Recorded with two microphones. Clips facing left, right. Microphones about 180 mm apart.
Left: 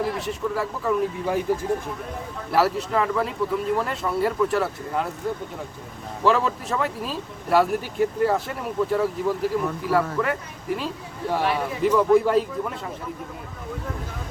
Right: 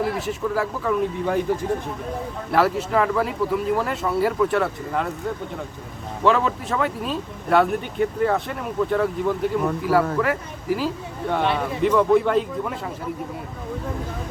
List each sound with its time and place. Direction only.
0.2 s speech: centre (ahead or behind)
2.5 s speech: centre (ahead or behind)
6.2 s speech: centre (ahead or behind)